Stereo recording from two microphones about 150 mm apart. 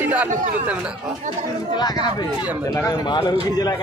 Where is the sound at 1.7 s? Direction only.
30° left (ahead or behind).